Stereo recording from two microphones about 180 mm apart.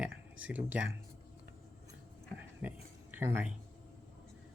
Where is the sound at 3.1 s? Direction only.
10° right (ahead or behind).